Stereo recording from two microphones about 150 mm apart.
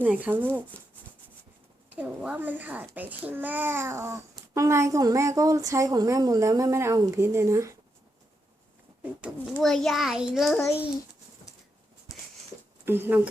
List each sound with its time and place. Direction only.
0.0 s speech: 10° right (ahead or behind)
1.9 s a child's voice: 10° right (ahead or behind)
9.6 s a child's voice: 5° left (ahead or behind)
12.8 s speech: 15° right (ahead or behind)